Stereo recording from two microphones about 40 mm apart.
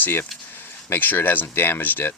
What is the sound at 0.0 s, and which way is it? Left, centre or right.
Speech, left.